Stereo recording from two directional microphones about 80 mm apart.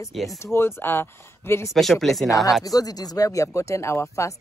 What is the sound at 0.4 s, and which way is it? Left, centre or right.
Speech, left.